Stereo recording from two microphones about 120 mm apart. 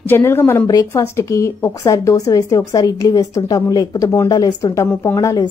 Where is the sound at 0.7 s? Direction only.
30° left (ahead or behind).